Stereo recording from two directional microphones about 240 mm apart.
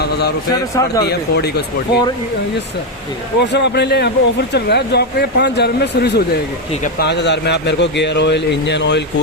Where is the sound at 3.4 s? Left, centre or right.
Left.